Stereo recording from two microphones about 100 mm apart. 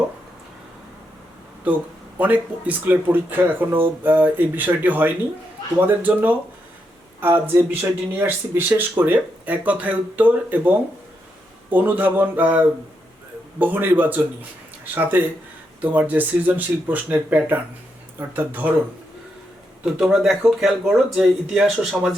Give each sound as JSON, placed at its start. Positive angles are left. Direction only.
{"t": 2.1, "sound": "speech", "side_deg": -15}
{"t": 19.8, "sound": "speech", "side_deg": -5}